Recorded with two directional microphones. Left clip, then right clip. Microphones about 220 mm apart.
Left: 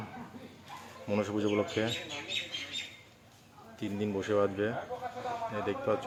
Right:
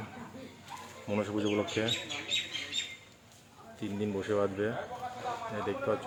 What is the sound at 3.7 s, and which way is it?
Speech, centre (ahead or behind).